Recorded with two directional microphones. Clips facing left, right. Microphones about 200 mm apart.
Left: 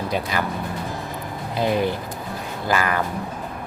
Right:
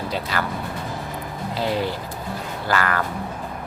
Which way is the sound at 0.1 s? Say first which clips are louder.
Left 2 dB; 15° left (ahead or behind).